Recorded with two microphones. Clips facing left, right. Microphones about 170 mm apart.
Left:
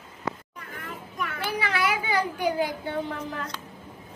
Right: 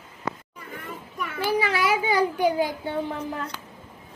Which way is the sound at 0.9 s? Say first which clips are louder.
Left 1 dB; 10° right (ahead or behind).